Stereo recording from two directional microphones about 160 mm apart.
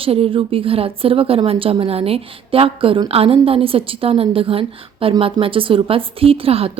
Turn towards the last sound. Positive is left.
turn(degrees=-35)  # may be behind; listen again after turning